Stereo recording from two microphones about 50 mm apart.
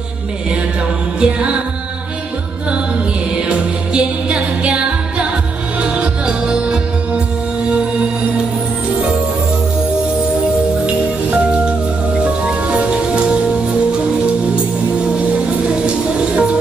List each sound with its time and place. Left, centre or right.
1.2 s music: right
3.3 s music: right
10.9 s music: right